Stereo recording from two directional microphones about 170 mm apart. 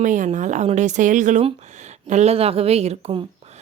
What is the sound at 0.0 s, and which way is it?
Speech, 45° right (ahead or behind).